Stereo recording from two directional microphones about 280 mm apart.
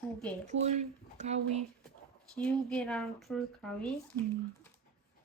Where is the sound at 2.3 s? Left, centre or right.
Centre.